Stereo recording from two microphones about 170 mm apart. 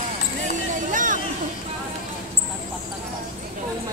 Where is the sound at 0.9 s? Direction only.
50° right (ahead or behind).